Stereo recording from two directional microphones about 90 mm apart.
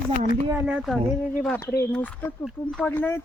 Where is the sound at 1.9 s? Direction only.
15° left (ahead or behind).